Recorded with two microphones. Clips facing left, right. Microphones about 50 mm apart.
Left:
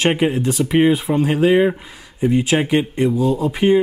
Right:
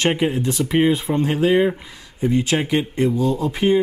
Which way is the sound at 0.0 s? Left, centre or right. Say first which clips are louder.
Left 2 dB; centre.